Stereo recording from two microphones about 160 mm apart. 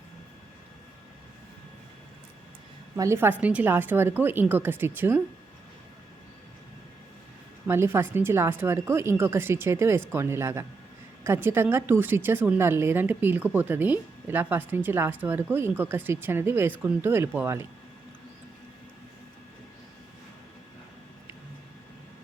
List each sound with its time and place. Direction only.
2.9 s speech: 15° right (ahead or behind)
7.7 s speech: 15° right (ahead or behind)